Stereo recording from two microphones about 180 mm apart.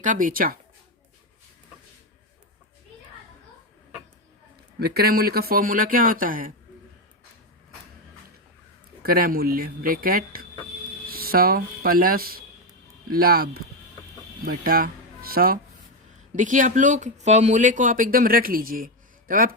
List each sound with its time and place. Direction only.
0.0 s speech: 45° right (ahead or behind)
4.8 s speech: 60° right (ahead or behind)
9.0 s speech: 55° right (ahead or behind)